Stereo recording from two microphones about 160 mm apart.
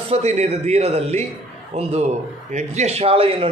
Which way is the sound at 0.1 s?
40° right (ahead or behind).